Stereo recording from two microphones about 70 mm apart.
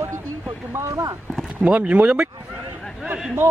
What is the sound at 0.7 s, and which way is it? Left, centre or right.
Speech, right.